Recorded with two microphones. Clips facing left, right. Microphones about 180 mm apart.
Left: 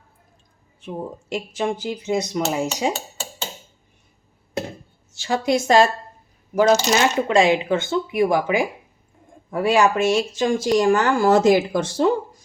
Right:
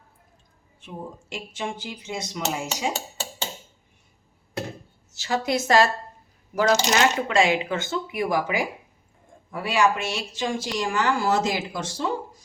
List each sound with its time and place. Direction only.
0.9 s speech: 40° left (ahead or behind)
5.3 s speech: 25° left (ahead or behind)
9.5 s speech: 50° left (ahead or behind)